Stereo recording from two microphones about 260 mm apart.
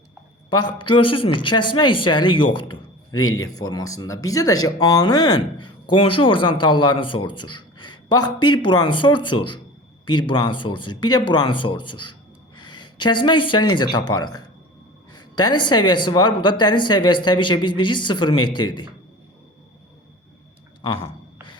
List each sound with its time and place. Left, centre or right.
0.9 s a man's voice: centre
12.5 s a sound: centre
13.7 s speech: centre